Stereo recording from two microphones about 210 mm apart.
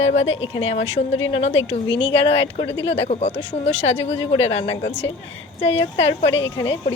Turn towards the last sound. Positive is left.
turn(degrees=30)  # may be behind; listen again after turning